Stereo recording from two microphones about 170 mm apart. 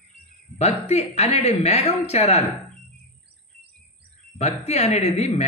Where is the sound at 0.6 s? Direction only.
40° left (ahead or behind).